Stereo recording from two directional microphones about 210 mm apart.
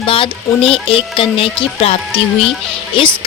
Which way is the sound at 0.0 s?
25° left (ahead or behind).